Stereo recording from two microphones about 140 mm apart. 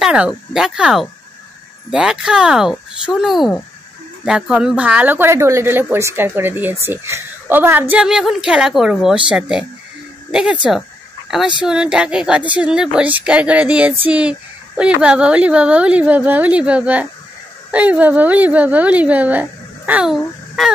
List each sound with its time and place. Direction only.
0.0 s a child's voice: 5° right (ahead or behind)